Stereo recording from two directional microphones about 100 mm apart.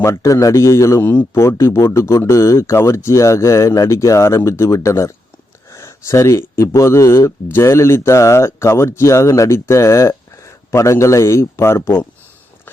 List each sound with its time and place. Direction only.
0.0 s speech: 30° left (ahead or behind)